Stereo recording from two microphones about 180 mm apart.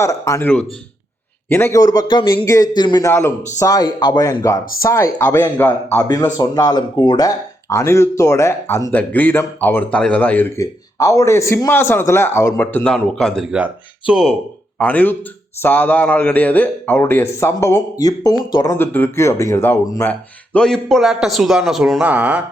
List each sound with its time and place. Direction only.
0.0 s speech: 15° left (ahead or behind); by 22.4 s 10° right (ahead or behind)